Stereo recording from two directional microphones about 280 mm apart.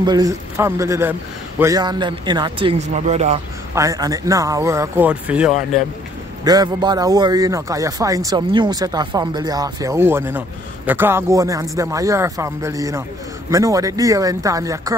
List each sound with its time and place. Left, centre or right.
0.0 s speech: centre
3.7 s speech: centre